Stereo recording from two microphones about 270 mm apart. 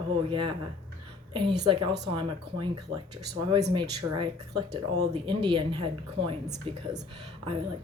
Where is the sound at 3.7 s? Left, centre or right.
Centre.